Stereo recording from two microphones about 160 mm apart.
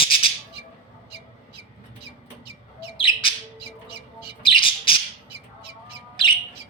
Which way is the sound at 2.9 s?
30° left (ahead or behind).